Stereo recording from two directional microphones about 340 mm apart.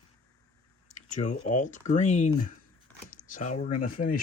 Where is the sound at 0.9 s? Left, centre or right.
Left.